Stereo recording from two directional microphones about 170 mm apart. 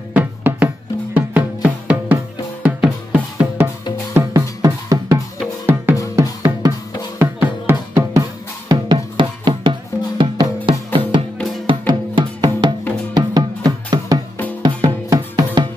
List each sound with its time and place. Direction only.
0.1 s music: 10° right (ahead or behind)
2.6 s drum: 5° right (ahead or behind)
4.1 s drum: 20° right (ahead or behind)
7.2 s music: 15° right (ahead or behind)